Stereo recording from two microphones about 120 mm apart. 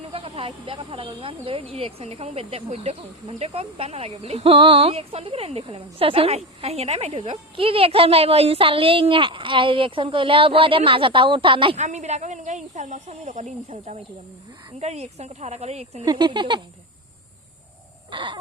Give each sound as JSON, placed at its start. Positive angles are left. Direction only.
{"t": 0.0, "sound": "speech", "side_deg": -55}
{"t": 4.5, "sound": "a woman's voice", "side_deg": -45}
{"t": 11.8, "sound": "speech", "side_deg": -75}
{"t": 16.0, "sound": "speech", "side_deg": -40}
{"t": 18.1, "sound": "speech", "side_deg": -40}